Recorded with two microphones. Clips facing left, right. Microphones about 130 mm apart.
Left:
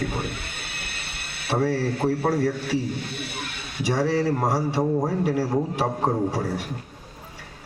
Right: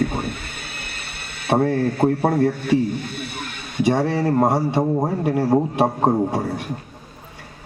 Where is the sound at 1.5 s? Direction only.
55° right (ahead or behind).